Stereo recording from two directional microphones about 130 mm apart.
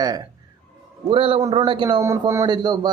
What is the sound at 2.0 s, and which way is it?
Speech, 25° right (ahead or behind).